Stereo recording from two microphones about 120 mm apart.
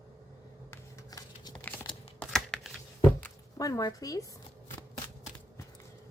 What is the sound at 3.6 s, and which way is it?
Speech, 30° left (ahead or behind).